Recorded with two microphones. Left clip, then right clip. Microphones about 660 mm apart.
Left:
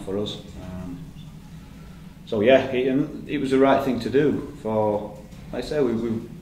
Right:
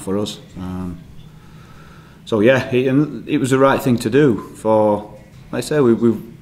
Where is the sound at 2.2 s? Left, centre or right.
Right.